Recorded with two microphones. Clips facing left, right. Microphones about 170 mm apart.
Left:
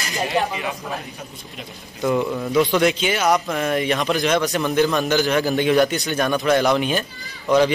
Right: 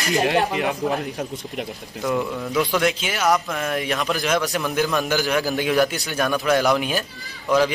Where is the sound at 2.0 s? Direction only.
Centre (ahead or behind).